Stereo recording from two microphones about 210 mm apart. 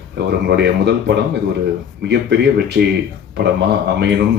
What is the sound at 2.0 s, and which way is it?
Speech, 55° right (ahead or behind).